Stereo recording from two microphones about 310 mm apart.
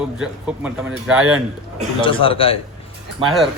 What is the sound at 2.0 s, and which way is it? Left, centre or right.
Speech, centre.